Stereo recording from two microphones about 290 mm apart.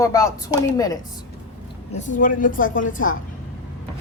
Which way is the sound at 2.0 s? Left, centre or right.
Left.